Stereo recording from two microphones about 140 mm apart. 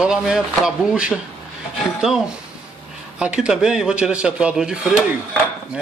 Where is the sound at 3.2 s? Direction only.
5° right (ahead or behind).